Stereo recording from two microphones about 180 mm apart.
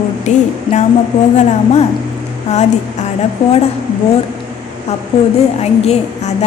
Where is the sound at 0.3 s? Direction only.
40° left (ahead or behind).